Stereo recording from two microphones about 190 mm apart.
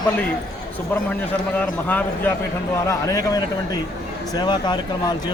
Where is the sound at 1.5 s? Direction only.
10° left (ahead or behind).